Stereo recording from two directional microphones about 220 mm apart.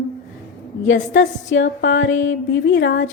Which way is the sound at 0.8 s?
55° left (ahead or behind).